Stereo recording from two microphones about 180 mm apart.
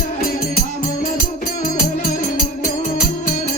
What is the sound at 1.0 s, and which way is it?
Music, 50° left (ahead or behind).